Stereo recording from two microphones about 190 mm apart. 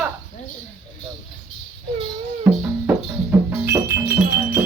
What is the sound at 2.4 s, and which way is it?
Music, 10° right (ahead or behind).